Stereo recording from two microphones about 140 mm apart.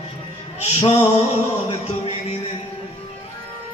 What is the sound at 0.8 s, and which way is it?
Male singing, 45° left (ahead or behind).